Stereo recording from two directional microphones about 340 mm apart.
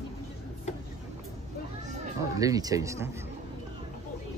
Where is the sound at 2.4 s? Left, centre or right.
Centre.